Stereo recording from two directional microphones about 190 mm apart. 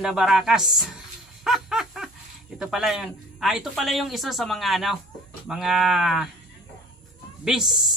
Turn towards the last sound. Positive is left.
turn(degrees=0)  # may be behind; listen again after turning